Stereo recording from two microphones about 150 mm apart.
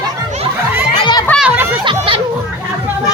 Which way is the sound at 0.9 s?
30° left (ahead or behind).